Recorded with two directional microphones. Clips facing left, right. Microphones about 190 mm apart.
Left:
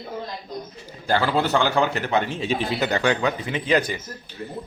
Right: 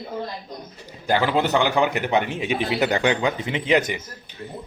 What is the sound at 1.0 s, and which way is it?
A man's voice, 15° right (ahead or behind).